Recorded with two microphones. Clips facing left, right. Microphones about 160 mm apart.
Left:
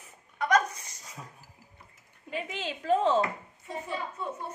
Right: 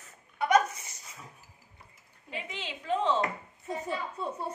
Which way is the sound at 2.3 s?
45° left (ahead or behind).